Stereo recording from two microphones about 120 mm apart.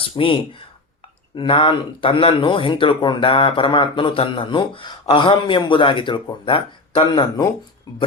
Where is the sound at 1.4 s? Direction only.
45° left (ahead or behind).